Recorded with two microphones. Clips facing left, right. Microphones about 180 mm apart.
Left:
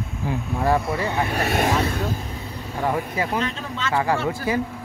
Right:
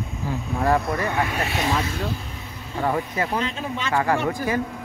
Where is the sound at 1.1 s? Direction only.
35° left (ahead or behind).